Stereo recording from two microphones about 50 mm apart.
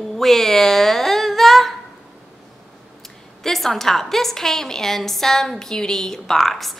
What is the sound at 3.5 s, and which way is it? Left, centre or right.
A woman's voice, centre.